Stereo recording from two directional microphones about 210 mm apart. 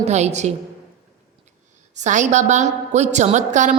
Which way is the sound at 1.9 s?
35° right (ahead or behind).